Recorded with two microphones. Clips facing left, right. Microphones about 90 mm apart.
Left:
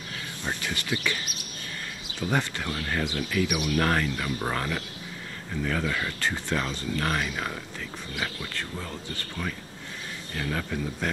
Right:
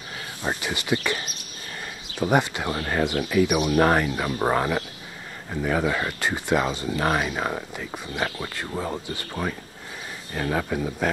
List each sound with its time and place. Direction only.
0.6 s speech: 20° right (ahead or behind)
2.2 s speech: 20° right (ahead or behind)
3.2 s speech: 15° right (ahead or behind)
3.4 s speech: 30° right (ahead or behind)
9.4 s speech: 20° right (ahead or behind)